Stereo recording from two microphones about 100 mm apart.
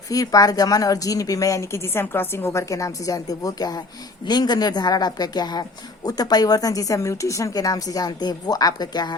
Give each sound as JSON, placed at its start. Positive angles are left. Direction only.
{"t": 0.1, "sound": "speech", "side_deg": 35}